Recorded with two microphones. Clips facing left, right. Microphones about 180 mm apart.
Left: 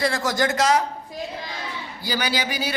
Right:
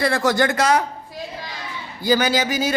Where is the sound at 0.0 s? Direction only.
60° right (ahead or behind).